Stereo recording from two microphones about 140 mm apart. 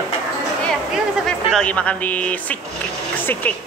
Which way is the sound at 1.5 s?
10° left (ahead or behind).